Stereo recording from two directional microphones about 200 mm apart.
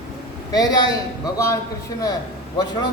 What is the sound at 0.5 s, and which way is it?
Speech, 20° left (ahead or behind).